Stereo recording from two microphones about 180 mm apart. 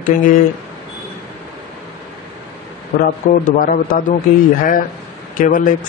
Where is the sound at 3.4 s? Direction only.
50° left (ahead or behind).